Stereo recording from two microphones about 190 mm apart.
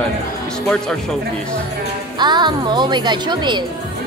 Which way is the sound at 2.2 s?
25° right (ahead or behind).